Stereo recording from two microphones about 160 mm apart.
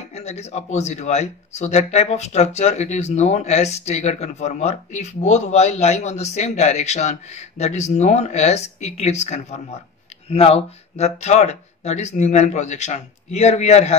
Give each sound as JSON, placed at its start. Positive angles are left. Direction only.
{"t": 0.1, "sound": "speech", "side_deg": 40}